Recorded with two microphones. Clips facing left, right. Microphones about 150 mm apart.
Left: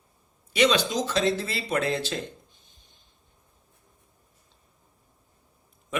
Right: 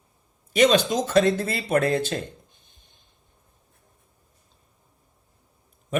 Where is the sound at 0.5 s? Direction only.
45° right (ahead or behind).